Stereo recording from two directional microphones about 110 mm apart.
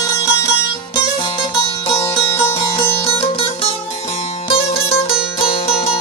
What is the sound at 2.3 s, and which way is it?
Music, 60° left (ahead or behind).